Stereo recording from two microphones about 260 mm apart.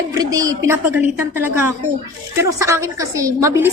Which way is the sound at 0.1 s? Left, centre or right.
Centre.